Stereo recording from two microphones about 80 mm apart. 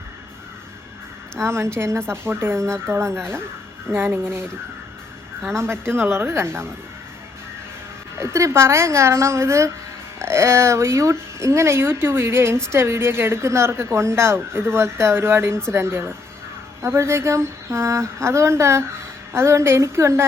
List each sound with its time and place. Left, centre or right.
1.4 s speech: right
5.5 s speech: right
8.2 s speech: right